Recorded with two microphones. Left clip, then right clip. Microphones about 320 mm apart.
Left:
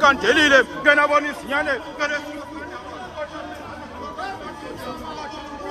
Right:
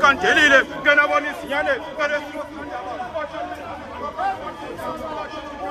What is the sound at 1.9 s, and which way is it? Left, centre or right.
Speech, centre.